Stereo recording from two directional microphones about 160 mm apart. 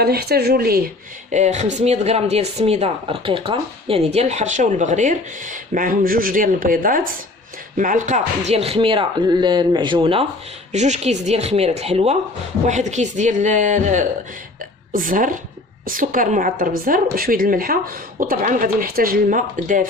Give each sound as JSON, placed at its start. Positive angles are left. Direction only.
{"t": 0.0, "sound": "speech", "side_deg": -80}
{"t": 1.3, "sound": "speech", "side_deg": -45}
{"t": 10.7, "sound": "a woman's voice", "side_deg": -45}